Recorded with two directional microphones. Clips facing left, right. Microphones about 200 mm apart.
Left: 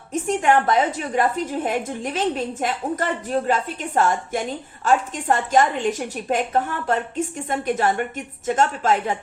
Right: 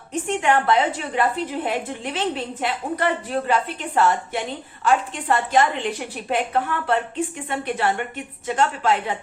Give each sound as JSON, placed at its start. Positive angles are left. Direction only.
{"t": 0.1, "sound": "a woman's voice", "side_deg": 40}